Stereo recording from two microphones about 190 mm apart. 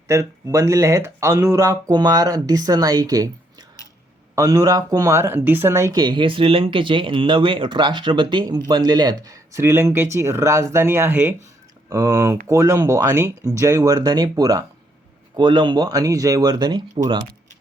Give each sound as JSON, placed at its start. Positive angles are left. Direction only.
{"t": 0.1, "sound": "speech", "side_deg": -15}
{"t": 4.4, "sound": "speech", "side_deg": -15}